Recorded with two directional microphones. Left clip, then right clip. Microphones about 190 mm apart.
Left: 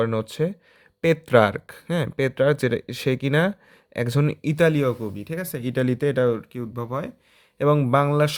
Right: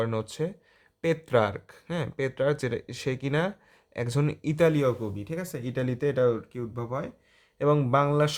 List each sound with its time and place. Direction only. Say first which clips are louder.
0.0 s speech: left 6 dB; 30° left (ahead or behind)